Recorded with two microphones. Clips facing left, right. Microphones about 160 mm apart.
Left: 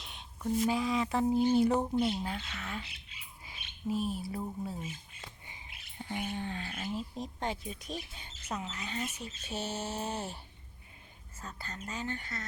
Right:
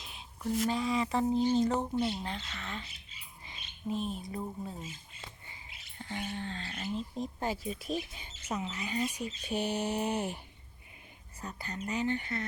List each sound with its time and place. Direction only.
0.0 s a sound: centre (ahead or behind)
0.7 s speech: centre (ahead or behind)
5.5 s speech: 15° left (ahead or behind); by 12.5 s 20° right (ahead or behind)